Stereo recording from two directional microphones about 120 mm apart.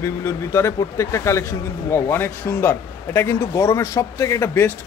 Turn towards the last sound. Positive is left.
turn(degrees=20)  # may be behind; listen again after turning